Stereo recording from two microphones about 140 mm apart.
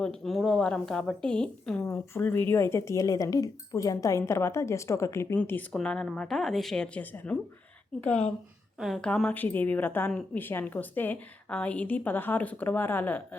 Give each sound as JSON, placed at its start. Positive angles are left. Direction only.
{"t": 0.0, "sound": "a woman's voice", "side_deg": 5}
{"t": 8.8, "sound": "a woman's voice", "side_deg": 5}